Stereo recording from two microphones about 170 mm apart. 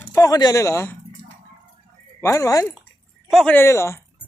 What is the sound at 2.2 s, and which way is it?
Speech, 15° left (ahead or behind).